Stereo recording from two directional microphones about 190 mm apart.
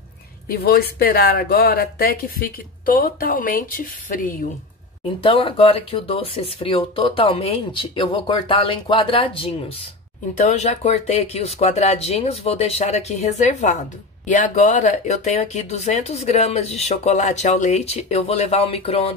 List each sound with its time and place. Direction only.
0.5 s speech: 55° left (ahead or behind)
5.2 s speech: 25° left (ahead or behind)